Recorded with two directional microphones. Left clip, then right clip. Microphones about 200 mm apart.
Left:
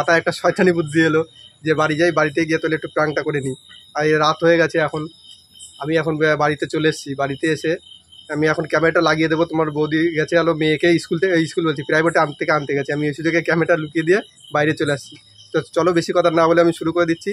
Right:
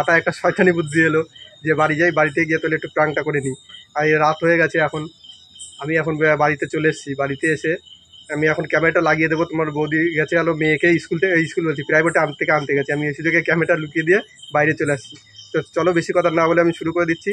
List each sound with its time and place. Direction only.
0.0 s a man's voice: 5° left (ahead or behind)